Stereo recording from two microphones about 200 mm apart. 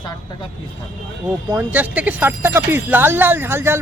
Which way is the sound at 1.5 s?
10° right (ahead or behind).